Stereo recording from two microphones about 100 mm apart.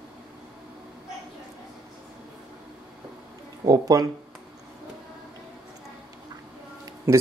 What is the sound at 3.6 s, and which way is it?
Speech, 35° right (ahead or behind).